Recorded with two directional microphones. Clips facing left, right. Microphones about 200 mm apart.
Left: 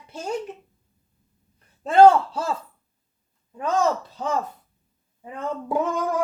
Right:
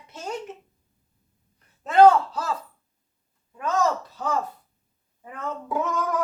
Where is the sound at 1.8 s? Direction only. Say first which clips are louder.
Left 2 dB; 30° left (ahead or behind).